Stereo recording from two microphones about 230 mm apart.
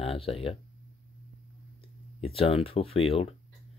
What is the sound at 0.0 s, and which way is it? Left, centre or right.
Speech, left.